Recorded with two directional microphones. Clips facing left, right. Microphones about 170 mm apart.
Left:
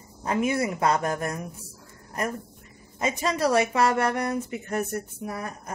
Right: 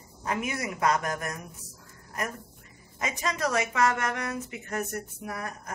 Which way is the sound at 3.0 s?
30° left (ahead or behind).